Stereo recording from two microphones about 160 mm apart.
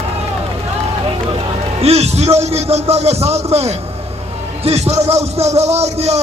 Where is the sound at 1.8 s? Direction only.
40° right (ahead or behind).